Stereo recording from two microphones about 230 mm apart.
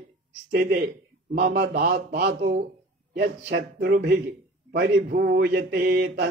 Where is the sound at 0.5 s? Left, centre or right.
Right.